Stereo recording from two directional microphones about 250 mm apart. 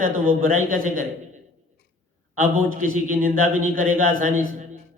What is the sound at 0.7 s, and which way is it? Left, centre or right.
Speech, right.